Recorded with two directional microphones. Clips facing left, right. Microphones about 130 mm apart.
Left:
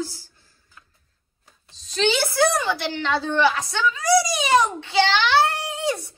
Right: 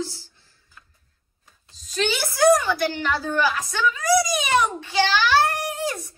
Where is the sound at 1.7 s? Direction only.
25° left (ahead or behind).